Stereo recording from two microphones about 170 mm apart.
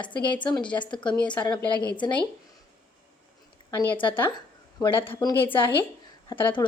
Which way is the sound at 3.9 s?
30° left (ahead or behind).